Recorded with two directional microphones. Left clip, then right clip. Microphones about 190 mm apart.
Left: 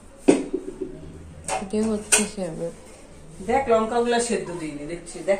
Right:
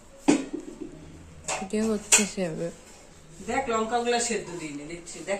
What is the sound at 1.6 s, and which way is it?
Speech, 40° right (ahead or behind).